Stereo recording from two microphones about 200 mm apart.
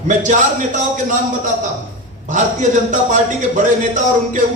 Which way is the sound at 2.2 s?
40° right (ahead or behind).